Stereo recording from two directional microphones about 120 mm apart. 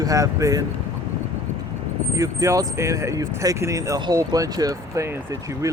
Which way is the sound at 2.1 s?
25° right (ahead or behind).